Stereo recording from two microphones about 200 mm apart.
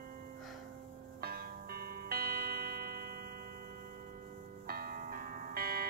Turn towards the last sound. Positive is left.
turn(degrees=-50)  # may be behind; listen again after turning